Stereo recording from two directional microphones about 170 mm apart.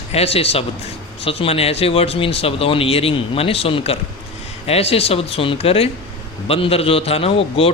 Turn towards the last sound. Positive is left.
turn(degrees=35)  # may be behind; listen again after turning